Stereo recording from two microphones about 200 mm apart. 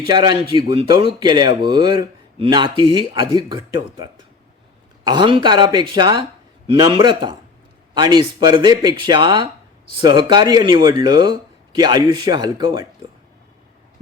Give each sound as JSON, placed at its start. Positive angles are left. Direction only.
{"t": 0.1, "sound": "speech", "side_deg": -20}